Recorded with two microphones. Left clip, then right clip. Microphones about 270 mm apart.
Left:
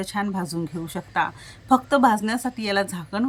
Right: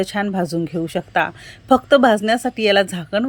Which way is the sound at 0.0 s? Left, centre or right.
Centre.